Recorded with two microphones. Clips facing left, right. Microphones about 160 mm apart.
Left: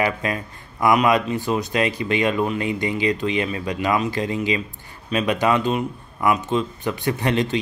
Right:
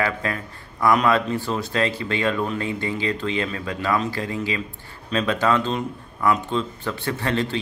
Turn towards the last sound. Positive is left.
turn(degrees=15)  # may be behind; listen again after turning